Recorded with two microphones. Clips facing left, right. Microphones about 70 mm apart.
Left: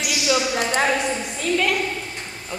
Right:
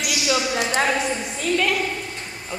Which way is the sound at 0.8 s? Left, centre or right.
Centre.